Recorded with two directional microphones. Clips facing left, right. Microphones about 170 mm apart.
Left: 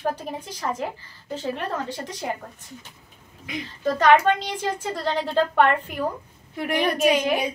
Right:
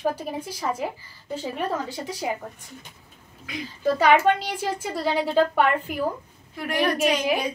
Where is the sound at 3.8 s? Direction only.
10° right (ahead or behind).